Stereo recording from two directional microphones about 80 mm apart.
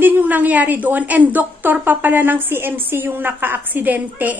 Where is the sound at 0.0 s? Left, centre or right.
Right.